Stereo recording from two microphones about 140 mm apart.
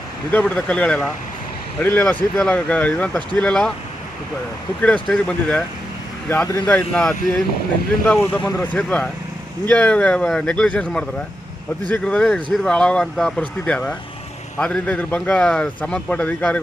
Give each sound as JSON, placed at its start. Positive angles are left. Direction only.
{"t": 0.3, "sound": "speech", "side_deg": 10}
{"t": 4.8, "sound": "speech", "side_deg": 10}